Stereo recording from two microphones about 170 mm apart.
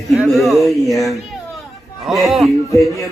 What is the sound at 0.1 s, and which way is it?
Speech, centre (ahead or behind).